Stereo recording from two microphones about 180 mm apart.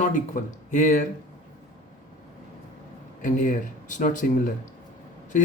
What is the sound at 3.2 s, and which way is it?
Speech, 45° left (ahead or behind).